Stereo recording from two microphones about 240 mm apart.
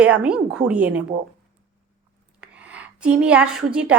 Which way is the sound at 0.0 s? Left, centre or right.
Centre.